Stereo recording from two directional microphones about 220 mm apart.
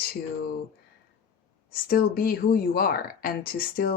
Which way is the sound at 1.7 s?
40° left (ahead or behind).